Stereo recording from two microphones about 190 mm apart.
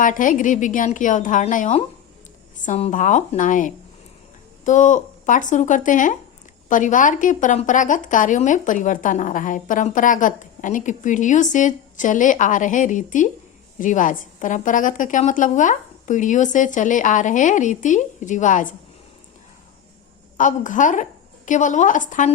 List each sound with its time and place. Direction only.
0.0 s a woman's voice: 45° left (ahead or behind)
20.3 s a woman's voice: 40° left (ahead or behind)